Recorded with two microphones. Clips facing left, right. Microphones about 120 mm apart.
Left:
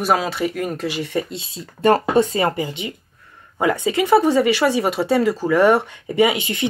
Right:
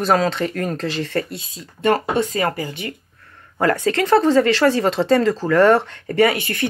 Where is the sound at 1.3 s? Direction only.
30° left (ahead or behind).